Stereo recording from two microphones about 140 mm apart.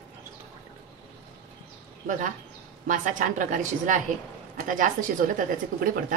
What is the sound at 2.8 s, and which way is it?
A woman's voice, 70° right (ahead or behind).